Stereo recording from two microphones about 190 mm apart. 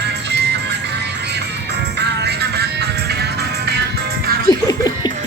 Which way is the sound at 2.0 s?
60° right (ahead or behind).